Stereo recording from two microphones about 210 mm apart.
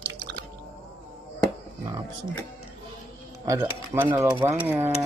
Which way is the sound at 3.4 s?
15° right (ahead or behind).